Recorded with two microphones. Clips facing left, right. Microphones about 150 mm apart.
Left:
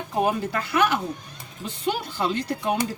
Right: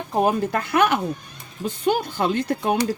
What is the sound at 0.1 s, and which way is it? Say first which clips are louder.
Speech: right 4 dB; 45° right (ahead or behind).